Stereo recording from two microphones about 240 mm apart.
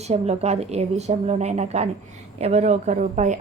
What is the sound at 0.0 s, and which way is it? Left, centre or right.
A woman's voice, right.